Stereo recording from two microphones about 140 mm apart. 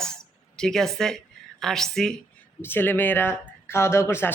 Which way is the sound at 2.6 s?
15° left (ahead or behind).